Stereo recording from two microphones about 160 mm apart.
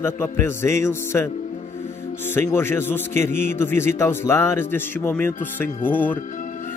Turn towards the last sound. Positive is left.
turn(degrees=10)  # may be behind; listen again after turning